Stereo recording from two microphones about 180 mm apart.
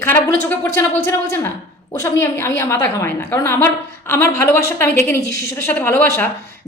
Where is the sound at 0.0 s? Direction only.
10° left (ahead or behind).